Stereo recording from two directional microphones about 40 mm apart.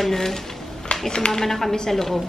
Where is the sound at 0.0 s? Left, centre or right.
Centre.